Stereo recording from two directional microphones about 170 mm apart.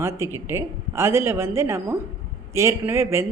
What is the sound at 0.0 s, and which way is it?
Speech, 15° right (ahead or behind).